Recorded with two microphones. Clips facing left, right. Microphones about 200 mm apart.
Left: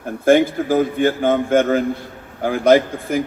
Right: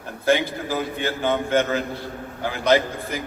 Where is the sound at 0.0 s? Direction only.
50° left (ahead or behind).